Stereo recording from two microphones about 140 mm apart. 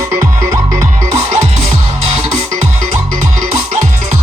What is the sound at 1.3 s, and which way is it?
Music, 60° right (ahead or behind).